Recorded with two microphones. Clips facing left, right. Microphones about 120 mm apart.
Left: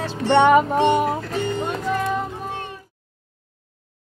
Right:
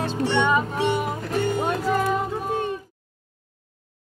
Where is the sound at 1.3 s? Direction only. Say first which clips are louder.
Right 1 dB; 5° right (ahead or behind).